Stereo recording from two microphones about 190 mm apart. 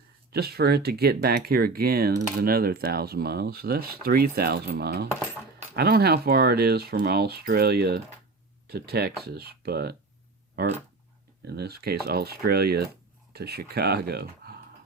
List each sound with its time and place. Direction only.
0.3 s speech: 55° right (ahead or behind)
11.4 s speech: 60° right (ahead or behind)